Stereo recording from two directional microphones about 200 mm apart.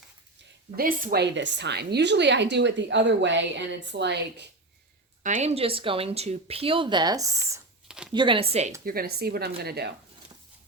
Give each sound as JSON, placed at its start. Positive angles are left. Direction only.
{"t": 0.8, "sound": "a woman's voice", "side_deg": -45}
{"t": 5.2, "sound": "speech", "side_deg": -35}
{"t": 7.9, "sound": "a sound", "side_deg": -5}
{"t": 8.1, "sound": "speech", "side_deg": -25}
{"t": 8.8, "sound": "speech", "side_deg": -45}